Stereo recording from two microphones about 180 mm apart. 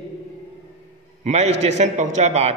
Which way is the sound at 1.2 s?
35° right (ahead or behind).